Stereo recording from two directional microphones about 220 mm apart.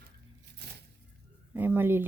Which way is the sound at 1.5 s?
10° right (ahead or behind).